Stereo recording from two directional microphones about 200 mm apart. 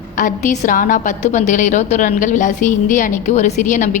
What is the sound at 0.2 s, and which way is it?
A woman's voice, 40° left (ahead or behind).